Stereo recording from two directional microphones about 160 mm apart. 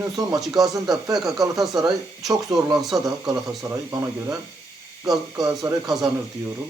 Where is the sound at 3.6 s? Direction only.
20° right (ahead or behind).